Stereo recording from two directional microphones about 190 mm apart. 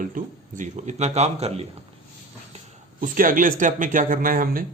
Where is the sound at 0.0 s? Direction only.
45° right (ahead or behind).